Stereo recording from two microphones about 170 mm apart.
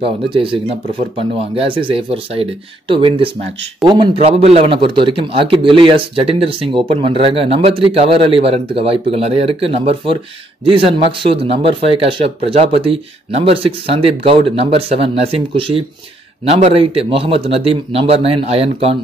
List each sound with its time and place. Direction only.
0.0 s a man's voice: 30° right (ahead or behind)